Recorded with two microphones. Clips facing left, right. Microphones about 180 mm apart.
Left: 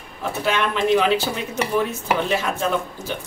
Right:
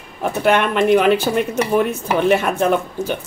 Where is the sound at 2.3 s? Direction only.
60° right (ahead or behind).